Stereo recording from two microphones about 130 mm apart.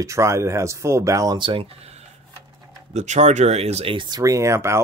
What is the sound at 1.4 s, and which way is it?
Speech, 40° right (ahead or behind).